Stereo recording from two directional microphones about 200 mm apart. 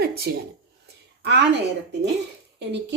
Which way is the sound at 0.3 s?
50° right (ahead or behind).